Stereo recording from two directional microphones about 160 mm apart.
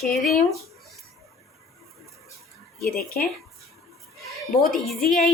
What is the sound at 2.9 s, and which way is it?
Speech, 65° left (ahead or behind).